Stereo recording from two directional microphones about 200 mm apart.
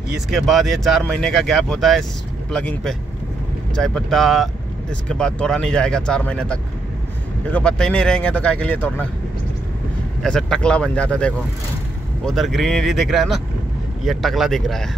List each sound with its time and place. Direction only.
0.3 s speech: centre (ahead or behind)
10.2 s speech: 5° left (ahead or behind)